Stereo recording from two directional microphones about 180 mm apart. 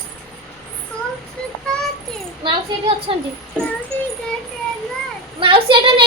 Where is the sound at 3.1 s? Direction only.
30° right (ahead or behind).